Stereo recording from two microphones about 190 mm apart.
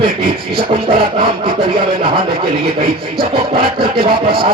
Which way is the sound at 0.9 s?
25° right (ahead or behind).